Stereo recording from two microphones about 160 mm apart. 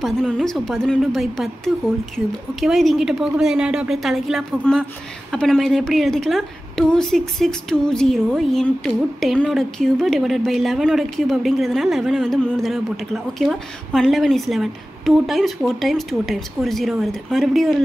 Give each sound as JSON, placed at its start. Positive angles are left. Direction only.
{"t": 0.0, "sound": "a woman's voice", "side_deg": 0}